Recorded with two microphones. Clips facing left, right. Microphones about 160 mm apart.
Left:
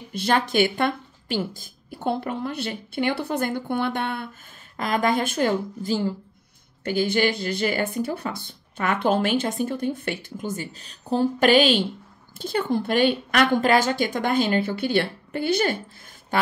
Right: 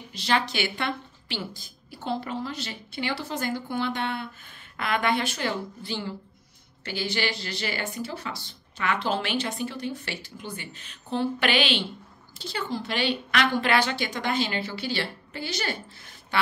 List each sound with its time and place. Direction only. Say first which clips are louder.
0.1 s a woman's voice: left 5 dB; 50° left (ahead or behind)